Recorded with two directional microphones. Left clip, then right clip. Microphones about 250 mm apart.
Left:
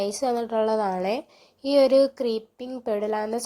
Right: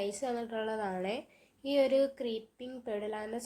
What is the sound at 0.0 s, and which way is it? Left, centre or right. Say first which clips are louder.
A woman's voice: left 10 dB; left.